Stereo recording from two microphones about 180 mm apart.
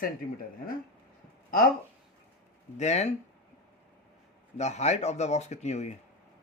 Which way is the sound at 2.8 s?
40° left (ahead or behind).